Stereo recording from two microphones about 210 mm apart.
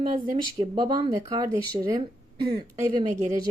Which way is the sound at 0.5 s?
25° right (ahead or behind).